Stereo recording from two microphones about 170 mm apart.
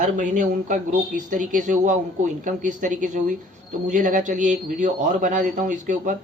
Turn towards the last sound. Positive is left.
turn(degrees=-50)  # may be behind; listen again after turning